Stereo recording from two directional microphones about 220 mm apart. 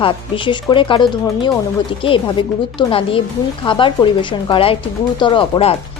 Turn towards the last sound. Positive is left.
turn(degrees=25)  # may be behind; listen again after turning